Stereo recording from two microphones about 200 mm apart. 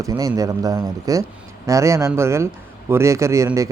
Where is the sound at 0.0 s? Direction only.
15° right (ahead or behind).